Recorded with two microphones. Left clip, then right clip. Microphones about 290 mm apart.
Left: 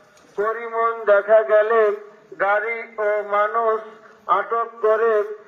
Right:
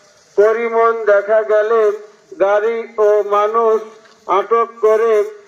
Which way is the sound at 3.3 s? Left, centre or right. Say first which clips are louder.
Right 6 dB; right.